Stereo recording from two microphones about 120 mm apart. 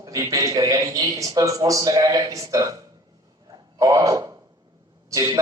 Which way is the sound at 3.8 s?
25° right (ahead or behind).